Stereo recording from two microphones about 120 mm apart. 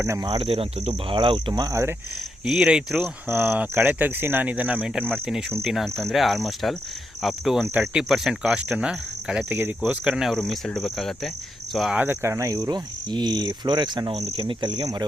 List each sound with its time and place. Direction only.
0.0 s speech: 25° right (ahead or behind)
0.3 s speech: 55° right (ahead or behind); by 2.0 s 20° right (ahead or behind)
2.4 s speech: 5° right (ahead or behind)
3.2 s speech: 20° right (ahead or behind)
5.6 s speech: centre (ahead or behind)
7.7 s speech: 10° right (ahead or behind)
9.5 s speech: 15° right (ahead or behind); by 11.9 s centre (ahead or behind)
11.9 s speech: 20° right (ahead or behind)
12.5 s speech: 35° right (ahead or behind)